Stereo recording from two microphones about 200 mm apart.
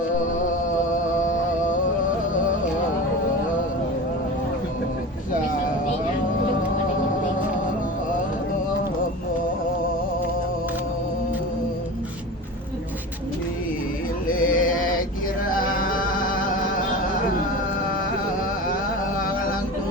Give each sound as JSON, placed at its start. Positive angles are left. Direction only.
{"t": 0.9, "sound": "music", "side_deg": 40}
{"t": 14.3, "sound": "a sound", "side_deg": 45}
{"t": 15.5, "sound": "music", "side_deg": 45}